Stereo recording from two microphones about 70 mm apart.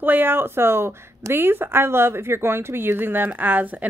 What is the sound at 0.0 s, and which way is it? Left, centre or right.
Speech, right.